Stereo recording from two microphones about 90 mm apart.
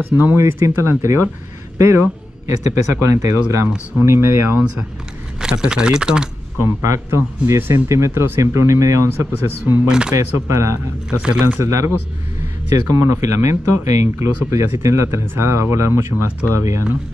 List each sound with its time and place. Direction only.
0.2 s speech: 25° right (ahead or behind)
5.4 s speech: 5° right (ahead or behind)
6.6 s speech: 30° right (ahead or behind)
9.8 s speech: 10° right (ahead or behind)
10.1 s speech: 35° right (ahead or behind)
11.1 s speech: 15° right (ahead or behind)
11.6 s speech: 35° right (ahead or behind)